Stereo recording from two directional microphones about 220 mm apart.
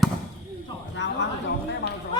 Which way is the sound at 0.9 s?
55° left (ahead or behind).